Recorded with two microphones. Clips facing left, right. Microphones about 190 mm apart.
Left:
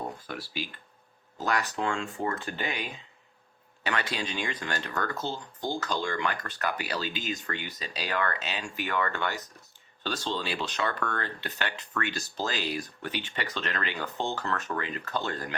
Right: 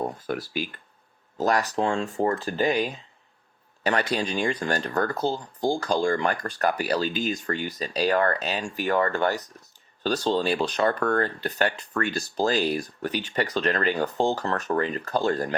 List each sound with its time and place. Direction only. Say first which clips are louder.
0.3 s speech: right 8 dB; 50° right (ahead or behind)